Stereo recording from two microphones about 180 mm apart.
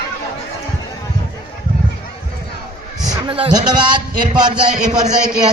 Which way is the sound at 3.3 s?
25° right (ahead or behind).